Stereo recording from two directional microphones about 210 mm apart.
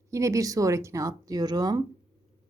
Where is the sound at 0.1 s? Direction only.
15° right (ahead or behind).